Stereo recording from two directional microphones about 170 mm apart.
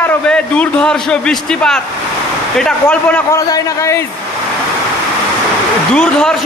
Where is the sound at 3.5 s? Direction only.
20° left (ahead or behind).